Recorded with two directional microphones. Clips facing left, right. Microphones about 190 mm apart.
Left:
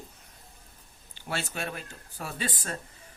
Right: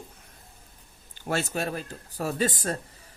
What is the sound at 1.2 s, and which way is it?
Speech, 45° right (ahead or behind).